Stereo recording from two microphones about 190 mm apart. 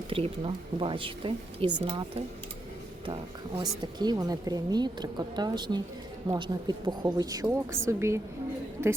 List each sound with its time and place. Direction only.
0.1 s a woman's voice: 30° right (ahead or behind)